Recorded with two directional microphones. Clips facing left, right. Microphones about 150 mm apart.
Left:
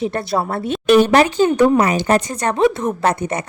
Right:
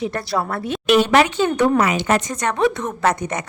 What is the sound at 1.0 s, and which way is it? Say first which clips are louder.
A woman's voice: left 3 dB; 40° left (ahead or behind).